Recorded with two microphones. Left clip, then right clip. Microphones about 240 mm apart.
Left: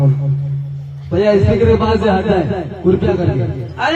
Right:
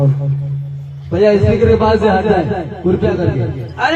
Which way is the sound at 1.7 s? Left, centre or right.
Right.